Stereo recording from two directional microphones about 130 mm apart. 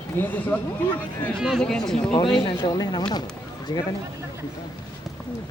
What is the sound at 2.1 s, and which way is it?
Speech, 40° left (ahead or behind).